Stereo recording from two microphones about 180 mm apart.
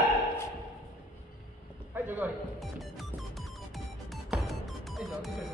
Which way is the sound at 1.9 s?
10° right (ahead or behind).